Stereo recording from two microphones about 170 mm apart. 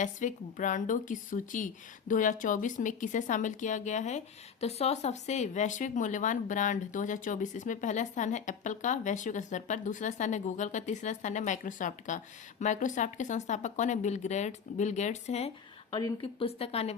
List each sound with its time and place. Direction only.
0.0 s speech: 50° left (ahead or behind)
16.0 s a woman's voice: 25° left (ahead or behind)